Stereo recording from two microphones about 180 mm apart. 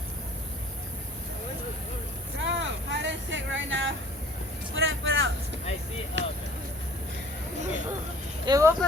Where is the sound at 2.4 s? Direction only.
90° right.